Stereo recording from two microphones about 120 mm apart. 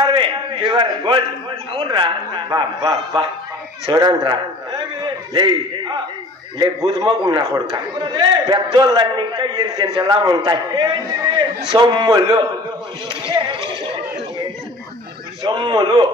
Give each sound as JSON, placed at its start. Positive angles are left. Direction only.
{"t": 0.0, "sound": "a sound", "side_deg": -45}
{"t": 1.9, "sound": "a man's voice", "side_deg": -40}
{"t": 2.8, "sound": "a man's voice", "side_deg": -30}
{"t": 15.4, "sound": "a man's voice", "side_deg": -35}